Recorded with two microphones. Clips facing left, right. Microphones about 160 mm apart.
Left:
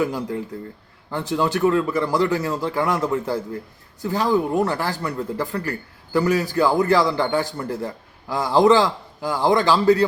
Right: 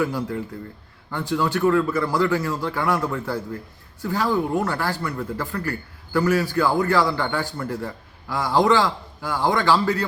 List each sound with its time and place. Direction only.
0.0 s speech: 15° left (ahead or behind)